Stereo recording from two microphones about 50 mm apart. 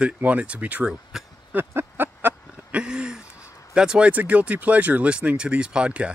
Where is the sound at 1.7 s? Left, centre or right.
Right.